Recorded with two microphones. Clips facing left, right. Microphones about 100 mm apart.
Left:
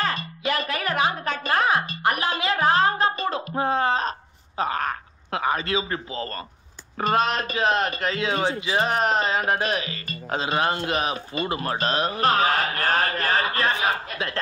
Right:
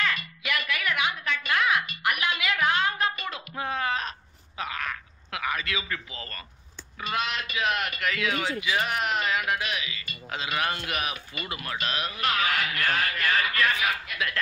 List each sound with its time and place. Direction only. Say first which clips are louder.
0.0 s music: left 4 dB; 35° left (ahead or behind)
4.6 s a sound: left 8 dB; 40° left (ahead or behind)
7.0 s speech: left 8 dB; 40° left (ahead or behind)